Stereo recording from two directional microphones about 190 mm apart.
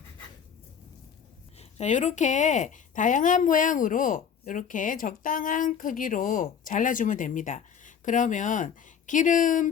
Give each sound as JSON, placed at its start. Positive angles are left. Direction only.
{"t": 1.5, "sound": "speech", "side_deg": 40}